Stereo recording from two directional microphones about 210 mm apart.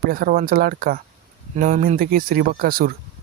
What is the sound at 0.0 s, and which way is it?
Speech, 45° right (ahead or behind).